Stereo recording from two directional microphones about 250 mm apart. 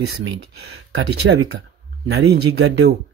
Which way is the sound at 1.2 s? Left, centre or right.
Right.